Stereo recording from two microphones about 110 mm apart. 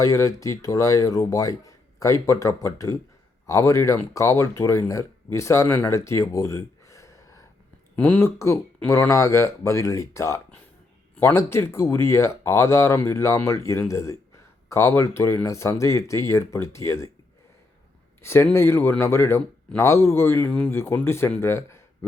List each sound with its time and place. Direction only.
0.0 s a man's voice: 30° left (ahead or behind)
5.9 s a sound: 25° left (ahead or behind)
7.9 s speech: 15° left (ahead or behind)
8.2 s a man's voice: 25° left (ahead or behind)
18.2 s a man's voice: 25° left (ahead or behind)